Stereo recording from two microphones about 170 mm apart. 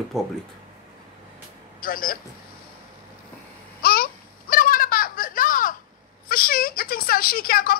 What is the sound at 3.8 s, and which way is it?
Babbling, 65° left (ahead or behind).